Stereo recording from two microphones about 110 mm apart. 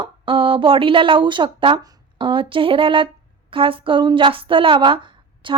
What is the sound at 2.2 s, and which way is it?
A woman's voice, 50° right (ahead or behind).